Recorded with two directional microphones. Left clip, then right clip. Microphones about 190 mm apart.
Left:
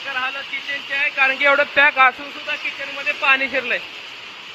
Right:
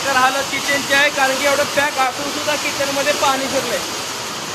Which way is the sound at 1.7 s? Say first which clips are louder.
Left 4 dB; 35° left (ahead or behind).